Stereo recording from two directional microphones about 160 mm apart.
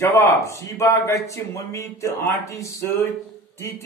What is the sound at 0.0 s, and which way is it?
A man's voice, 15° left (ahead or behind).